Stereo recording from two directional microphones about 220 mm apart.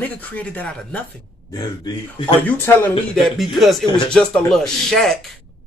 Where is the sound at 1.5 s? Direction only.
20° left (ahead or behind).